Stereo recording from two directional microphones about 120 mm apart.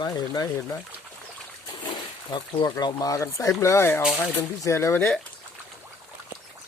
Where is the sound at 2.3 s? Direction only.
35° left (ahead or behind).